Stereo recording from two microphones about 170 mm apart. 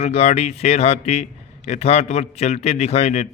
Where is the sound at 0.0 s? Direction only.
40° left (ahead or behind).